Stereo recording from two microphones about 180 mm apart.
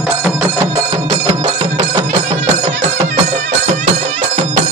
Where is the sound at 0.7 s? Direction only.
30° right (ahead or behind).